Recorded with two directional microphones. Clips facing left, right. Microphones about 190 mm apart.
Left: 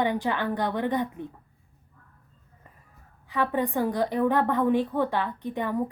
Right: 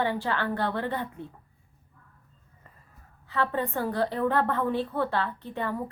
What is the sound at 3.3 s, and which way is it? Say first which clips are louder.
A woman's voice: left 2 dB; 15° left (ahead or behind).